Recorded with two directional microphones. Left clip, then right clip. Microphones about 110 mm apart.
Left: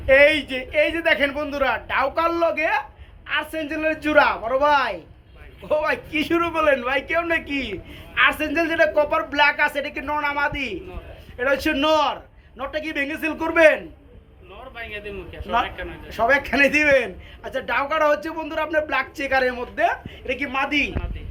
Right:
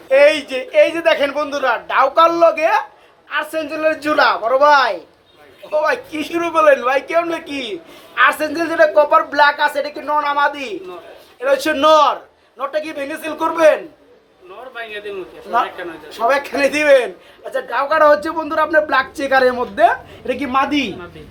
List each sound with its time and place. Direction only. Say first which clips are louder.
0.1 s a man's voice: right 3 dB; 5° right (ahead or behind)
8.2 s a man's voice: right 4 dB; centre (ahead or behind)
14.8 s a man's voice: right 5 dB; 70° right (ahead or behind)
16.0 s a man's voice: right 2 dB; 10° right (ahead or behind)